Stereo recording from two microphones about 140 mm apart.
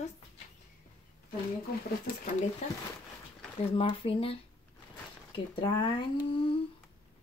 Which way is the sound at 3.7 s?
40° left (ahead or behind).